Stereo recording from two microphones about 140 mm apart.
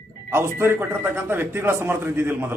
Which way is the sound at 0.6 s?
15° right (ahead or behind).